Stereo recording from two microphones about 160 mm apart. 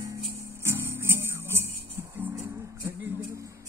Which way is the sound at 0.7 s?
15° right (ahead or behind).